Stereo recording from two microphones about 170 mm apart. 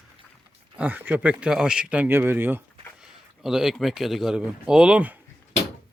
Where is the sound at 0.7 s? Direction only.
10° right (ahead or behind).